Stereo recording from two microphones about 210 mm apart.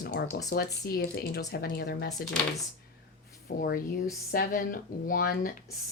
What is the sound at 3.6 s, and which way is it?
Speech, 40° left (ahead or behind).